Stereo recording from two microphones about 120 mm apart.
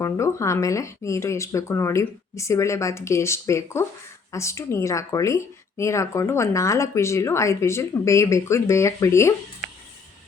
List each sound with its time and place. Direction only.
0.0 s speech: 25° left (ahead or behind)